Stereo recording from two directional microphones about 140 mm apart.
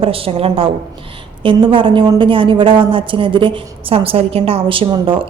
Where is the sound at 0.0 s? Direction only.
40° right (ahead or behind).